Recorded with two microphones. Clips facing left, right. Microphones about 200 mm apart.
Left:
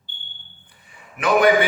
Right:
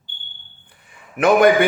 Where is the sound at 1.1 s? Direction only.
50° right (ahead or behind).